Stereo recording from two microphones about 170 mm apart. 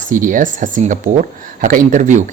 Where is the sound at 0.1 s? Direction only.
50° right (ahead or behind).